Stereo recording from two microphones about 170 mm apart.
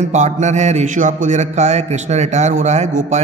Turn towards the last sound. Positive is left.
turn(degrees=-45)  # may be behind; listen again after turning